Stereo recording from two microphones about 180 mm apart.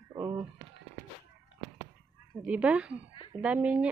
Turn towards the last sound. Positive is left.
turn(degrees=-5)  # may be behind; listen again after turning